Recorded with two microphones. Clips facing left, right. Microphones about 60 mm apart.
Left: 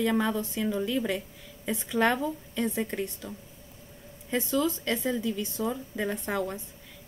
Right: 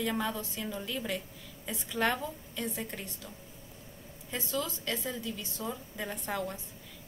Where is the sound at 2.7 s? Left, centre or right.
Left.